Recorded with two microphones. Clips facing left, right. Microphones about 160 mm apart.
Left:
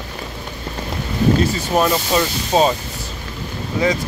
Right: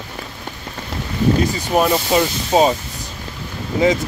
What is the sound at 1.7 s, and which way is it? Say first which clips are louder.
Speech: right 2 dB; 10° right (ahead or behind).